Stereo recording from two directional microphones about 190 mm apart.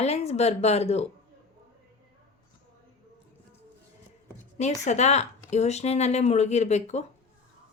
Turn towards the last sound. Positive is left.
turn(degrees=35)  # may be behind; listen again after turning